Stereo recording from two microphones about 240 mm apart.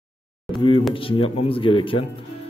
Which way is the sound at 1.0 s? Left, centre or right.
Left.